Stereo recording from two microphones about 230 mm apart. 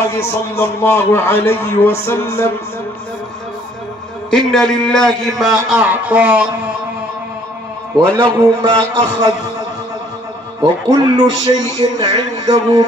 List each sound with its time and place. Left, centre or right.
0.0 s a man's voice: centre
4.3 s a man's voice: centre
8.2 s a man's voice: centre
10.6 s a man's voice: centre